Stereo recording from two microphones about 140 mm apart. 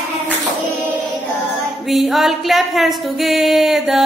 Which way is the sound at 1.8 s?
Centre (ahead or behind).